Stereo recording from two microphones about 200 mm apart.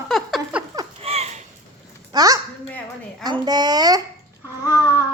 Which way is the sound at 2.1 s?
20° right (ahead or behind).